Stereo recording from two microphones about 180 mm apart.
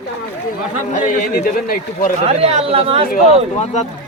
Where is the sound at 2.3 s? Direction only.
35° right (ahead or behind).